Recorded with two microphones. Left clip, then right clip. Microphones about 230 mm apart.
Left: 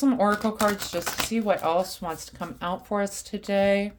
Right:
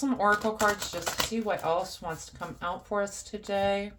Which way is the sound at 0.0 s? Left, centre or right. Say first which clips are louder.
Left 6 dB; left.